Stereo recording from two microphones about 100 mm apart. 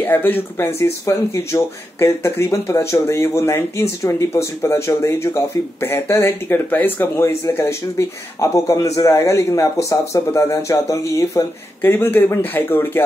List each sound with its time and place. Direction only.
0.0 s speech: 20° left (ahead or behind)
11.8 s speech: 20° left (ahead or behind)